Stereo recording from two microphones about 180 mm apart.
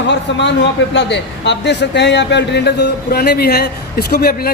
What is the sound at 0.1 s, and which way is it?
A man's voice, 75° left (ahead or behind).